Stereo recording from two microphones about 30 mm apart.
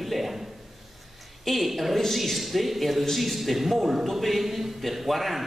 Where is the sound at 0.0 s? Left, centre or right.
Centre.